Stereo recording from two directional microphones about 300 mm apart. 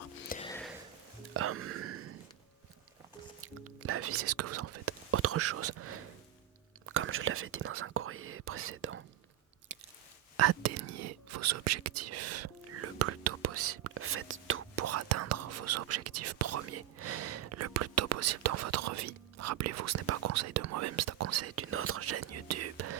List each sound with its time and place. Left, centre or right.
0.3 s whispering: left
1.3 s music: right
3.4 s whispering: right
9.7 s chewing: right
10.3 s speech: right